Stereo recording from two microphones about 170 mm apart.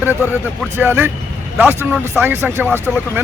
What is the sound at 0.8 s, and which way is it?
Speech, 10° right (ahead or behind).